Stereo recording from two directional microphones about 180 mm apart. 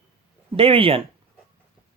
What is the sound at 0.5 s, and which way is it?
Speech, 30° right (ahead or behind).